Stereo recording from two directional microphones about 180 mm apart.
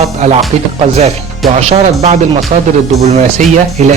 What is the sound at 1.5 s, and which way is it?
Speech, 35° right (ahead or behind).